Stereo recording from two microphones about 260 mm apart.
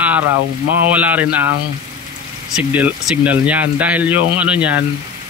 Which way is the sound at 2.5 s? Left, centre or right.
Centre.